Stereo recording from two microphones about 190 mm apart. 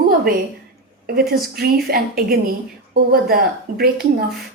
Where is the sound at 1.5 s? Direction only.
55° right (ahead or behind).